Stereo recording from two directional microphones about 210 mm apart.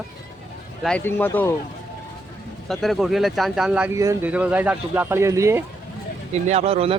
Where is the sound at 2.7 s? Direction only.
Centre (ahead or behind).